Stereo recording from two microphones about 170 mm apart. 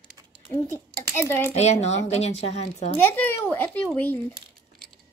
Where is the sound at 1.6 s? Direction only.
40° left (ahead or behind).